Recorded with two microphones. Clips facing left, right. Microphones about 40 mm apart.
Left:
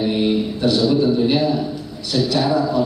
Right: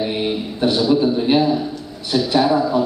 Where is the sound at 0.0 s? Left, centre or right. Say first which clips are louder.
Left 3 dB; centre.